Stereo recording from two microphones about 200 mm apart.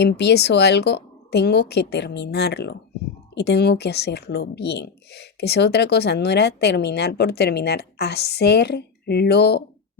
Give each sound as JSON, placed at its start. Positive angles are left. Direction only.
{"t": 0.0, "sound": "speech", "side_deg": 55}